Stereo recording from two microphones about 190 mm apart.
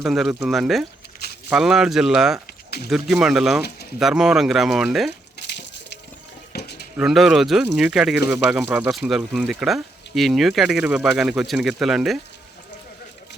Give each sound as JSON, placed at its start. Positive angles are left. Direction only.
{"t": 0.0, "sound": "speech", "side_deg": 0}
{"t": 6.5, "sound": "a sound", "side_deg": 60}
{"t": 6.9, "sound": "speech", "side_deg": -5}